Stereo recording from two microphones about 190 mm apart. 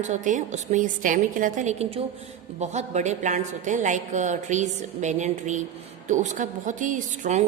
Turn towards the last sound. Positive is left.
turn(degrees=-40)  # may be behind; listen again after turning